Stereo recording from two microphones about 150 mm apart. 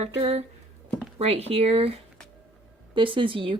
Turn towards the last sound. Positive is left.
turn(degrees=-35)  # may be behind; listen again after turning